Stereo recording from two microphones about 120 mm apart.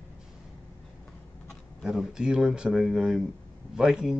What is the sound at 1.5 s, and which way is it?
Speech, centre (ahead or behind).